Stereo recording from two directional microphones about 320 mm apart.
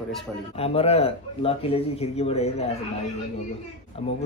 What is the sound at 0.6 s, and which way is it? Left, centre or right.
A man's voice, centre.